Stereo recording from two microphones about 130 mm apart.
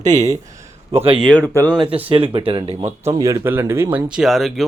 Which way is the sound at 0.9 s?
55° right (ahead or behind).